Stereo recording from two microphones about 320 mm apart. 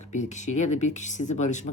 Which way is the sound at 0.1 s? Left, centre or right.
Left.